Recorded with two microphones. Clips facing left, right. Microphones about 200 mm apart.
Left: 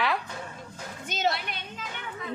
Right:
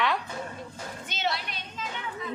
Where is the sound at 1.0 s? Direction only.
45° left (ahead or behind).